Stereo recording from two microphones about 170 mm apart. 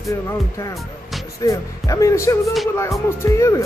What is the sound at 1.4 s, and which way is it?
Speech, 20° left (ahead or behind).